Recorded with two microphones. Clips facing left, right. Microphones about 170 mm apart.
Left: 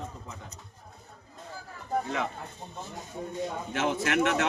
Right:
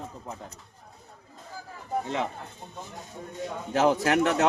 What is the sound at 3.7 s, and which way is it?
Speech, 35° right (ahead or behind).